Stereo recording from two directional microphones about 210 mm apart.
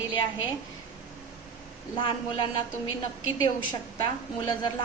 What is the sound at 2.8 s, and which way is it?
Speech, 75° left (ahead or behind).